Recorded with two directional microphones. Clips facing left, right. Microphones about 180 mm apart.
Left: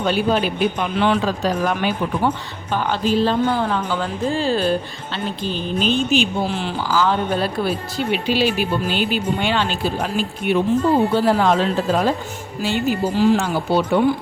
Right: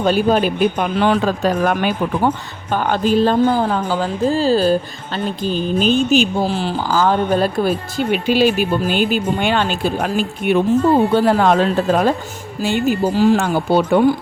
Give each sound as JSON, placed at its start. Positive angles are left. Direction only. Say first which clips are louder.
{"t": 0.0, "sound": "speech", "louder": "right 4 dB", "side_deg": -45}
{"t": 3.4, "sound": "speech", "louder": "right 4 dB", "side_deg": -35}
{"t": 6.8, "sound": "speech", "louder": "right 3 dB", "side_deg": -45}